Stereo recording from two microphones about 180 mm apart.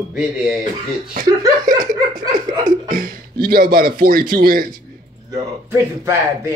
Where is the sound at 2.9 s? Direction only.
55° right (ahead or behind).